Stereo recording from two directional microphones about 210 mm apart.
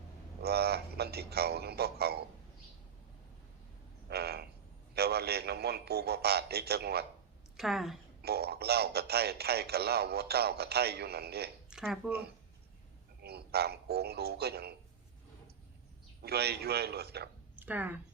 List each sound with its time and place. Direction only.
0.4 s a man's voice: 50° right (ahead or behind)
4.1 s frog: 50° right (ahead or behind)
4.9 s a man's voice: 50° right (ahead or behind)
7.5 s a woman's voice: centre (ahead or behind)
8.2 s a man's voice: 50° right (ahead or behind)
11.7 s speech: 5° right (ahead or behind)
13.2 s a man's voice: 50° right (ahead or behind)
16.2 s a man's voice: 50° right (ahead or behind)
17.6 s speech: 10° right (ahead or behind)